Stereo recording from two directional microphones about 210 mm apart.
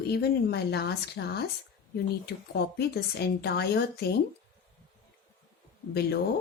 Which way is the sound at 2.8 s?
50° left (ahead or behind).